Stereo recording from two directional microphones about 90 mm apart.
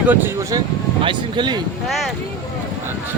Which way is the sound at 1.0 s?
65° right (ahead or behind).